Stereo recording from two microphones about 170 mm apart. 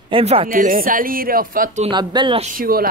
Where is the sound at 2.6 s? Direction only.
60° right (ahead or behind).